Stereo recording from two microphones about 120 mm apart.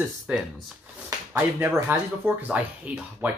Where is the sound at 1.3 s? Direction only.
15° right (ahead or behind).